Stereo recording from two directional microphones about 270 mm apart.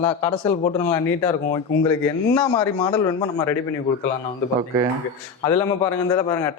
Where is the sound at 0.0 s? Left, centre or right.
Centre.